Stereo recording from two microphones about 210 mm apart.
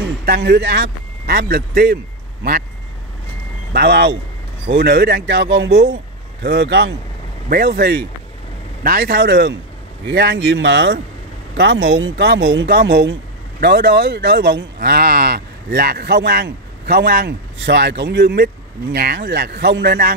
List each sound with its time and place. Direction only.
0.0 s a sound: 45° right (ahead or behind)
0.4 s a man's voice: 55° right (ahead or behind)
3.7 s speech: 50° right (ahead or behind)
7.4 s speech: 50° right (ahead or behind)